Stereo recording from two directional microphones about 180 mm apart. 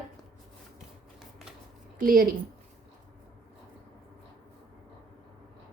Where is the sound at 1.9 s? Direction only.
50° right (ahead or behind).